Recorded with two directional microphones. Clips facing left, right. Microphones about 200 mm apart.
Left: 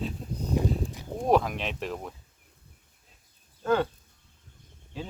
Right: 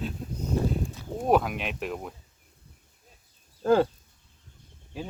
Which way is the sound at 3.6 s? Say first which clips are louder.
Right 4 dB; 30° right (ahead or behind).